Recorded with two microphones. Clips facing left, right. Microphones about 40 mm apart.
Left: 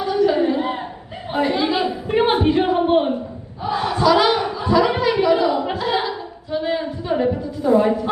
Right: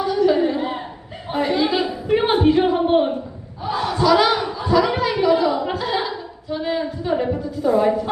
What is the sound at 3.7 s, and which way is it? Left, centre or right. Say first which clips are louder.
Crowd: left 1 dB; left.